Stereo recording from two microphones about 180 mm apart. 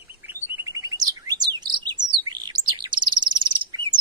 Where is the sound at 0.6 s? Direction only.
20° right (ahead or behind).